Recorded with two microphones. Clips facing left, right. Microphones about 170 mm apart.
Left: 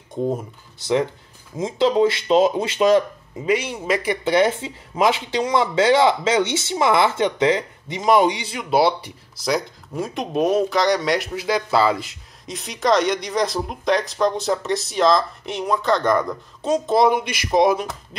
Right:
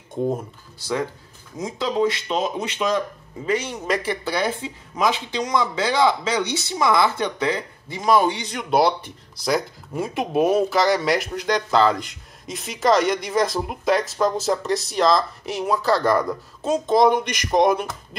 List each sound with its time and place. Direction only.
0.1 s speech: centre (ahead or behind)
0.7 s speech: 20° left (ahead or behind)
3.4 s speech: 10° left (ahead or behind)